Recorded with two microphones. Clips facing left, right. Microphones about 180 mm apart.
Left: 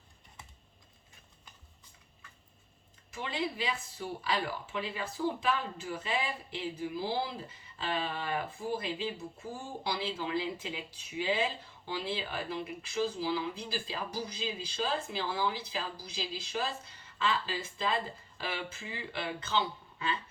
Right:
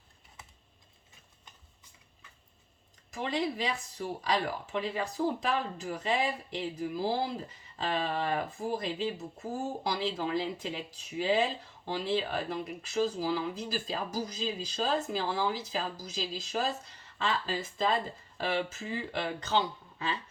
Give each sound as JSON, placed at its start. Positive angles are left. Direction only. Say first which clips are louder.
{"t": 3.1, "sound": "speech", "louder": "right 4 dB", "side_deg": -40}